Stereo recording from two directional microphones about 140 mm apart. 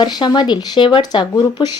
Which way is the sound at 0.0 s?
30° left (ahead or behind).